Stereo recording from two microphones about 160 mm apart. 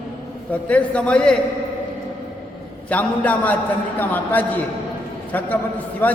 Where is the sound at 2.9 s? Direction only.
10° left (ahead or behind).